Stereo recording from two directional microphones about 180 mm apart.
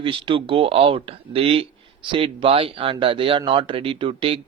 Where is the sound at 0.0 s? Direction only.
30° right (ahead or behind).